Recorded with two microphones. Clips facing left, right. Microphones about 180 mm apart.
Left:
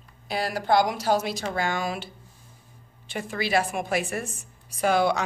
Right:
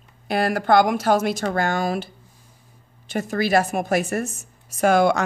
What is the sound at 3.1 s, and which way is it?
Speech, 45° right (ahead or behind).